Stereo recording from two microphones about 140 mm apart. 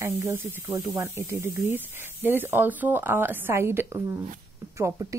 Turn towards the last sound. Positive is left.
turn(degrees=-20)  # may be behind; listen again after turning